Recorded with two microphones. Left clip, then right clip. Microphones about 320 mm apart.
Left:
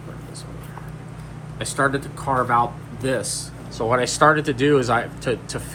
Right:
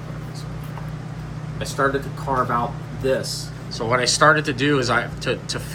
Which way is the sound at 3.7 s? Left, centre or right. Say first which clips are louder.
Right 1 dB; centre.